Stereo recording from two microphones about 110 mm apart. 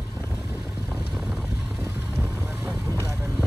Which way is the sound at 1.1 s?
5° right (ahead or behind).